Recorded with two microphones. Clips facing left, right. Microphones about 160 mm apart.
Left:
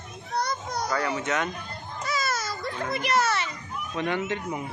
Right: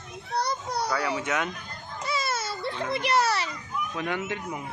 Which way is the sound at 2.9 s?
30° right (ahead or behind).